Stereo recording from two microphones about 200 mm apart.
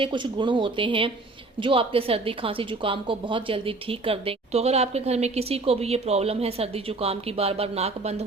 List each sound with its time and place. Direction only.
0.0 s a woman's voice: 25° right (ahead or behind)